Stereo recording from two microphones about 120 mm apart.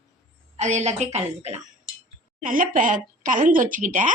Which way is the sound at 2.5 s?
90° right.